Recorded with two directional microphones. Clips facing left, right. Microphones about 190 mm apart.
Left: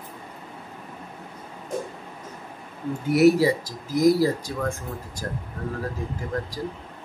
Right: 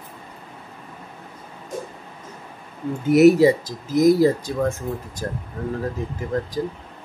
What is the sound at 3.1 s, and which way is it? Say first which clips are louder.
Speech: right 5 dB; 20° right (ahead or behind).